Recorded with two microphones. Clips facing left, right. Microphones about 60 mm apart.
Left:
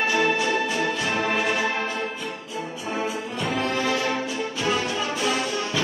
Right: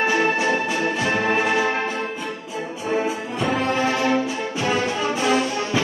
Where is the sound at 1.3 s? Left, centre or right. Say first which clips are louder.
Right 4 dB; right.